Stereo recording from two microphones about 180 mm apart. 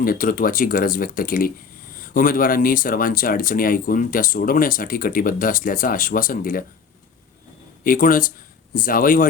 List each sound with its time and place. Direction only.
0.0 s speech: 50° left (ahead or behind)
7.9 s speech: 50° left (ahead or behind)